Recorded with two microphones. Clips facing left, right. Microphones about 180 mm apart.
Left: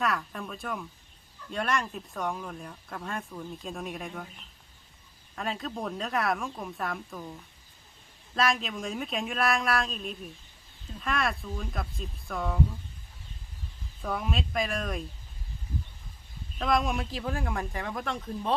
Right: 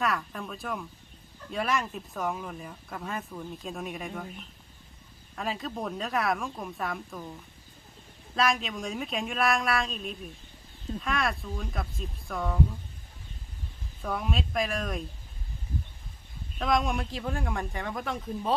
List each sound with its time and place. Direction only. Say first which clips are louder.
0.0 s speech: even; centre (ahead or behind)
5.4 s speech: even; centre (ahead or behind)
8.4 s speech: right 1 dB; centre (ahead or behind)
14.0 s speech: even; centre (ahead or behind)
16.6 s speech: even; centre (ahead or behind)